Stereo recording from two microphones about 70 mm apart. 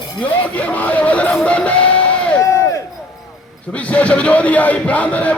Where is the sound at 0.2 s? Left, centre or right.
Centre.